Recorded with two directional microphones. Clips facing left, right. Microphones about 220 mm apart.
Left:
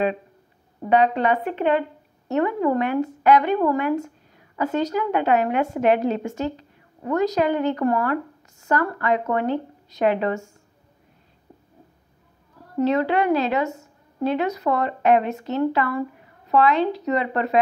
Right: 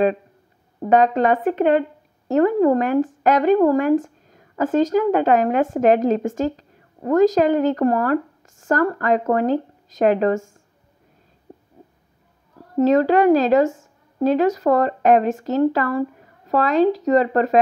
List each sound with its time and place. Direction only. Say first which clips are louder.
0.8 s speech: right 3 dB; 45° right (ahead or behind)
11.5 s a sound: right 6 dB; 45° right (ahead or behind)
12.7 s speech: right 5 dB; 40° right (ahead or behind)